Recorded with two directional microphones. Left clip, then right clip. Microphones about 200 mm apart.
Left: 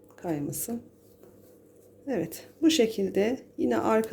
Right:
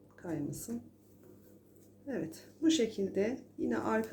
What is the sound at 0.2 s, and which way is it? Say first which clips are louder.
Speech: left 7 dB; 35° left (ahead or behind).